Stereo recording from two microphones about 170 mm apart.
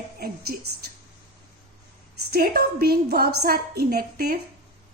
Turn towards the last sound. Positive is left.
turn(degrees=-65)  # may be behind; listen again after turning